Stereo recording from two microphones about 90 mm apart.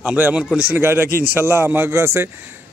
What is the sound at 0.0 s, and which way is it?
A man's voice, 15° right (ahead or behind).